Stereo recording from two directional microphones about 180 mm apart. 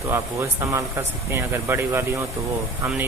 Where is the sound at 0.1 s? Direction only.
15° right (ahead or behind).